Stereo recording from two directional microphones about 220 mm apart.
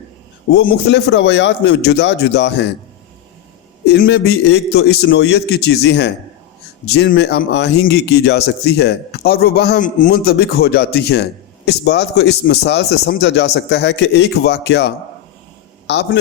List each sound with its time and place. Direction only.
0.5 s speech: 45° left (ahead or behind)
3.8 s speech: 55° left (ahead or behind)